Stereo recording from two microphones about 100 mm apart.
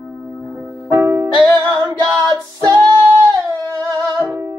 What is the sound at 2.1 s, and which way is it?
Female singing, 40° right (ahead or behind).